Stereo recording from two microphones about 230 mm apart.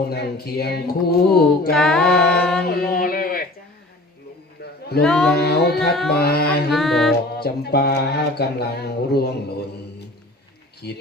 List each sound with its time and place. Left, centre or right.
0.1 s speech: left
1.7 s mantra: centre
2.6 s a sound: left
4.6 s a sound: left
5.0 s mantra: centre
5.3 s music: left
5.8 s mantra: centre
6.1 s speech: left
6.7 s music: centre
7.3 s speech: left
10.8 s speech: left